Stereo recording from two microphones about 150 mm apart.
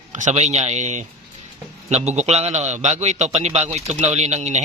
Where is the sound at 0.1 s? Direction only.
50° right (ahead or behind).